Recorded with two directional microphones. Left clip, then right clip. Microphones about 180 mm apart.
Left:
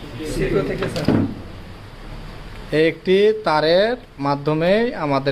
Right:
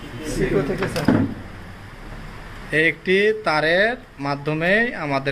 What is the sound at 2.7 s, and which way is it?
A man's voice, 15° left (ahead or behind).